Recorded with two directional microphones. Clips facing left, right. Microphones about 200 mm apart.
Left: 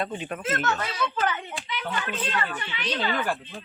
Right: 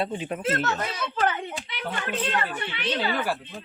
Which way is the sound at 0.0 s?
30° right (ahead or behind).